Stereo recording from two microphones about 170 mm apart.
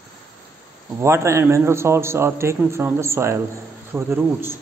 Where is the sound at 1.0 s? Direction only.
15° right (ahead or behind).